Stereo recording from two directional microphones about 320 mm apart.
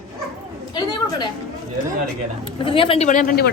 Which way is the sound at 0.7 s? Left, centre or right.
Centre.